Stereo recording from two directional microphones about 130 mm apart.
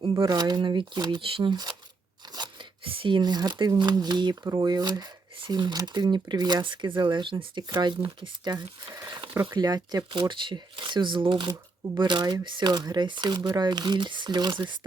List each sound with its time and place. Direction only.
0.0 s speech: 35° right (ahead or behind)
9.3 s speech: 15° right (ahead or behind)
9.6 s speech: 30° right (ahead or behind)